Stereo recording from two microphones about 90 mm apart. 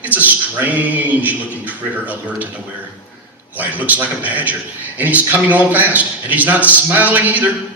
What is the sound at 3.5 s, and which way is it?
A man's voice, 20° right (ahead or behind).